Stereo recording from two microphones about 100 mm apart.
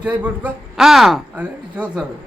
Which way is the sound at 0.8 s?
5° right (ahead or behind).